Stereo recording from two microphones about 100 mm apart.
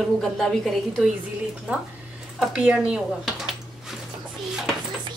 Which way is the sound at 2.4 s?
10° right (ahead or behind).